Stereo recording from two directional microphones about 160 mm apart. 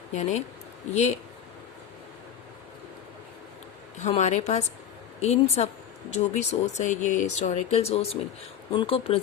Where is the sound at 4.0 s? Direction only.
45° left (ahead or behind).